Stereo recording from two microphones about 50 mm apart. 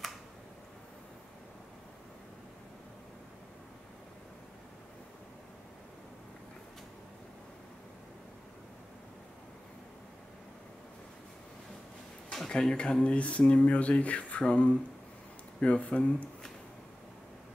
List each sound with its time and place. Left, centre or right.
12.3 s speech: centre